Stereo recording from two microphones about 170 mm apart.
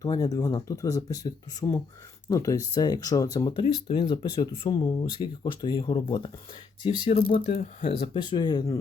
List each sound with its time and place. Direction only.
0.0 s speech: 20° left (ahead or behind)
7.1 s speech: 55° left (ahead or behind); by 8.8 s 20° left (ahead or behind)